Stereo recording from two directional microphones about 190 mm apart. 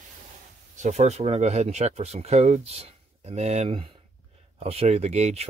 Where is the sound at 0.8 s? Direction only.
35° right (ahead or behind).